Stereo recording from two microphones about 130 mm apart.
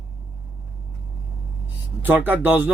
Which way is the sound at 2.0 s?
15° right (ahead or behind).